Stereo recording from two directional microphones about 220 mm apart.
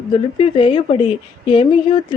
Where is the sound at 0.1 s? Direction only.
25° left (ahead or behind).